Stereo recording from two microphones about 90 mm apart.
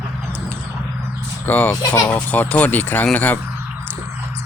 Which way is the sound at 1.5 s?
20° left (ahead or behind).